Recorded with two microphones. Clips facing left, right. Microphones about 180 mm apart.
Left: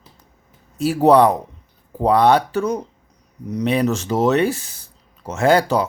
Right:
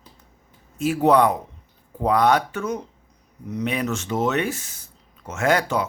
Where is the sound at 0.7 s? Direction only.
35° left (ahead or behind).